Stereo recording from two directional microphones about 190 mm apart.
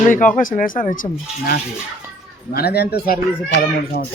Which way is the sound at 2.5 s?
55° left (ahead or behind).